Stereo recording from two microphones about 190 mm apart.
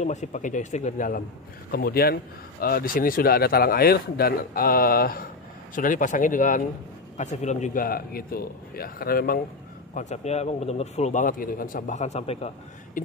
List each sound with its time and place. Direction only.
0.0 s a man's voice: 40° left (ahead or behind)
9.9 s a man's voice: 35° left (ahead or behind)